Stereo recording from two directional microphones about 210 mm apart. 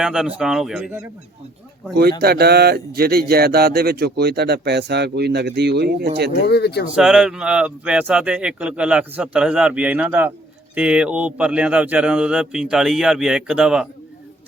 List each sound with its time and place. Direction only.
0.0 s speech: 5° right (ahead or behind)
2.2 s speech: 50° right (ahead or behind)
6.5 s speech: 50° left (ahead or behind)
6.9 s speech: 5° right (ahead or behind)